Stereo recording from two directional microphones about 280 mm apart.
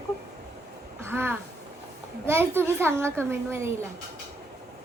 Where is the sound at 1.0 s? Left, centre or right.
Centre.